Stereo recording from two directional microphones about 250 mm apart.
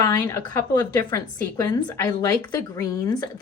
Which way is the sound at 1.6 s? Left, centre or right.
Centre.